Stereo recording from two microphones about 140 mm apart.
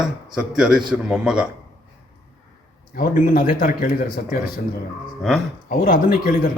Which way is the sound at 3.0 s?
75° left (ahead or behind).